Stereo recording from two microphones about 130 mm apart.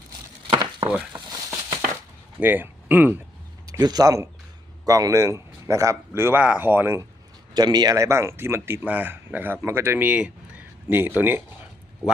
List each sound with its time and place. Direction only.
0.5 s chopping: 35° right (ahead or behind)
2.4 s speech: 15° right (ahead or behind)
3.7 s speech: 30° right (ahead or behind); by 7.0 s 15° right (ahead or behind)
7.5 s speech: 30° right (ahead or behind); by 11.4 s 15° right (ahead or behind)